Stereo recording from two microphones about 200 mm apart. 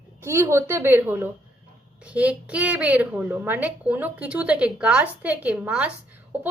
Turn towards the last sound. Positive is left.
turn(degrees=-10)  # may be behind; listen again after turning